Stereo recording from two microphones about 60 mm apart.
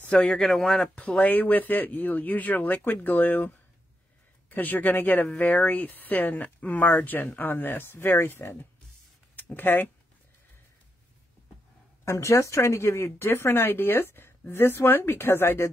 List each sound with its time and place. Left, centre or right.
0.0 s speech: centre
0.9 s speech: left
12.0 s speech: left